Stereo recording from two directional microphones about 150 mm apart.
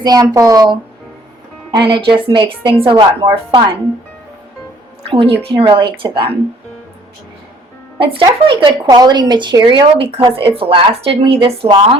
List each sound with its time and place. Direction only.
0.0 s speech: 25° right (ahead or behind)
1.7 s speech: 35° right (ahead or behind)
5.0 s speech: 40° right (ahead or behind)
7.9 s speech: 35° right (ahead or behind)